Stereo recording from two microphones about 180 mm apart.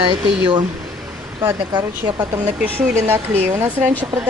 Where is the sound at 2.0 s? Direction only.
20° right (ahead or behind).